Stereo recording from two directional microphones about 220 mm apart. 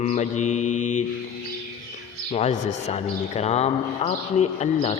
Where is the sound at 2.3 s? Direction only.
30° left (ahead or behind).